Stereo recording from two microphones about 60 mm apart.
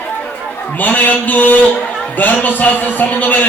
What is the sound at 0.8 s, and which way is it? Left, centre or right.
A man's voice, left.